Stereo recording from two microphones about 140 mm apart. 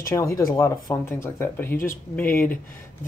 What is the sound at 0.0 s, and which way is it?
Speech, 20° left (ahead or behind).